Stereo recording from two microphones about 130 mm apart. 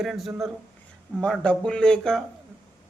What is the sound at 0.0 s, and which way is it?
Speech, 5° right (ahead or behind).